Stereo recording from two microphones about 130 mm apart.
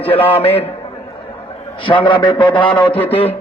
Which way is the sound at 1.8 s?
40° left (ahead or behind).